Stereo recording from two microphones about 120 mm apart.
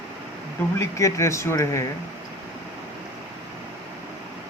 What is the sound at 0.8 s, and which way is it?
Speech, 25° left (ahead or behind).